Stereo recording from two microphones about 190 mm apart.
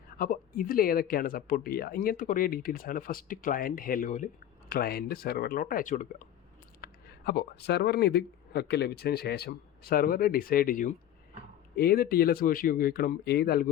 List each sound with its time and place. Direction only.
0.2 s speech: 45° left (ahead or behind)
6.8 s speech: 55° left (ahead or behind)